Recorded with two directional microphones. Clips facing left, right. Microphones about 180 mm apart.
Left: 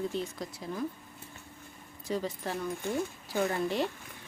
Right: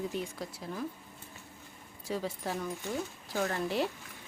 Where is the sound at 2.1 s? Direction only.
5° right (ahead or behind).